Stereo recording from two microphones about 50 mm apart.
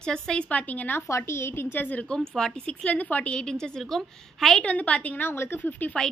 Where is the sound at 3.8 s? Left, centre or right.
Centre.